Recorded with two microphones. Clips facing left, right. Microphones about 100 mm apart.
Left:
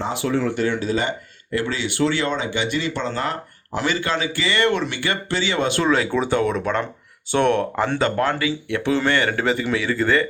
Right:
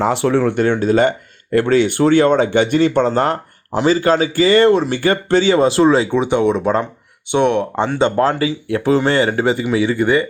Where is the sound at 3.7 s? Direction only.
30° right (ahead or behind); by 7.6 s 15° right (ahead or behind).